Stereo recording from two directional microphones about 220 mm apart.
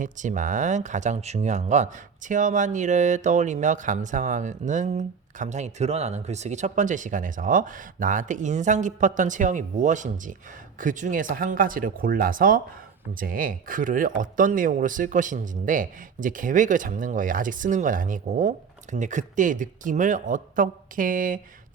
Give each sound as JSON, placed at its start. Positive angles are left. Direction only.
{"t": 0.0, "sound": "speech", "side_deg": -35}